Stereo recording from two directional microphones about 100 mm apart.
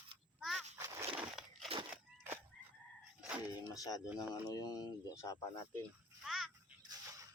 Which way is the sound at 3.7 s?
35° left (ahead or behind).